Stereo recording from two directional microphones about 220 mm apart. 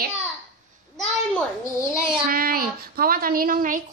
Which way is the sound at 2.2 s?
40° right (ahead or behind).